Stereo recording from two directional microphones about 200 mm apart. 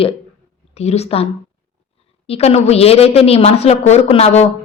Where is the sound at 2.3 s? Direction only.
30° left (ahead or behind).